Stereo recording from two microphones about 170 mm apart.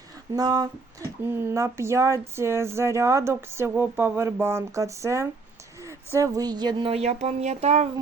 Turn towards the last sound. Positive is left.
turn(degrees=-40)  # may be behind; listen again after turning